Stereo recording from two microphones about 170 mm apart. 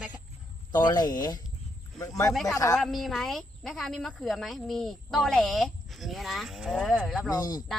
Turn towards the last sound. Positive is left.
turn(degrees=25)  # may be behind; listen again after turning